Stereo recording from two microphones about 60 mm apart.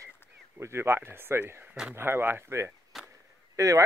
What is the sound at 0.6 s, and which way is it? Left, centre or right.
Speech, right.